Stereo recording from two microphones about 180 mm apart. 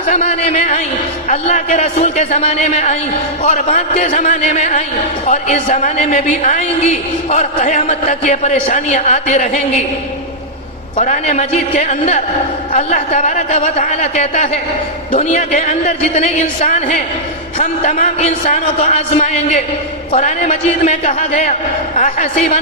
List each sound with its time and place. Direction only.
0.1 s a man's voice: 40° left (ahead or behind)
10.9 s a man's voice: 40° left (ahead or behind)